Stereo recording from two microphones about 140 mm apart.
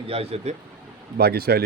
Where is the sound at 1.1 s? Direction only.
90° right.